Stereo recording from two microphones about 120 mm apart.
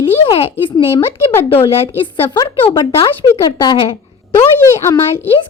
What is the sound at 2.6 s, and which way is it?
Speech, 45° left (ahead or behind).